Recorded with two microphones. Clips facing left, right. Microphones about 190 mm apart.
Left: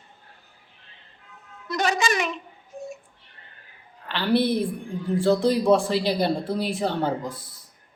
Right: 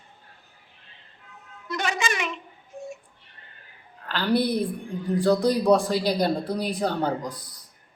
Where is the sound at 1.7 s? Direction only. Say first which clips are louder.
Left 4 dB; 40° left (ahead or behind).